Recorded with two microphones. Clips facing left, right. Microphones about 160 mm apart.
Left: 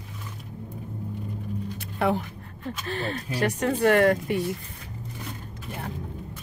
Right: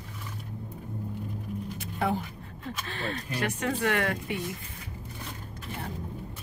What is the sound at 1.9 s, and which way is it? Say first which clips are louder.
Speech: left 4 dB; 65° left (ahead or behind).